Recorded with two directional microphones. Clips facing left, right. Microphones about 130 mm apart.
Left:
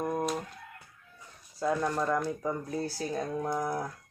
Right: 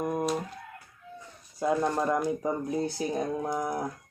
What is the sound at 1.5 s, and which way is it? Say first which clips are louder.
Speech: right 3 dB; 20° right (ahead or behind).